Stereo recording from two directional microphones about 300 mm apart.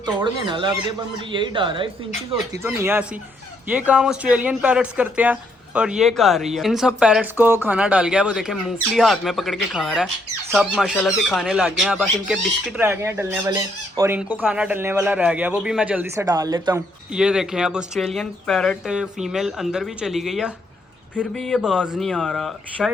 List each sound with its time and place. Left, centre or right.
0.0 s speech: centre